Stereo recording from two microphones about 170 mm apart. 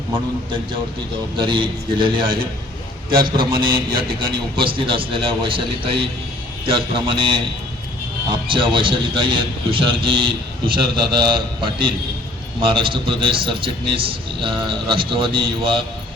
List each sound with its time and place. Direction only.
1.4 s a man's voice: 30° right (ahead or behind)
8.4 s a man's voice: 30° right (ahead or behind)